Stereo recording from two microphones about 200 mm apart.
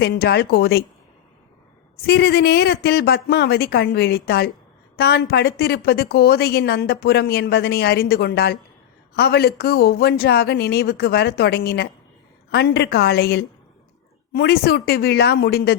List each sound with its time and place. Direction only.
0.0 s a woman's voice: 55° left (ahead or behind)
2.0 s a woman's voice: 55° left (ahead or behind)